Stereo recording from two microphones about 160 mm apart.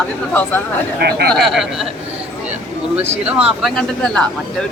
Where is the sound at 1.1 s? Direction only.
85° right.